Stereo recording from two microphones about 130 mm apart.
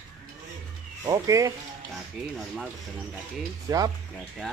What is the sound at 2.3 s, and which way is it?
Speech, centre (ahead or behind).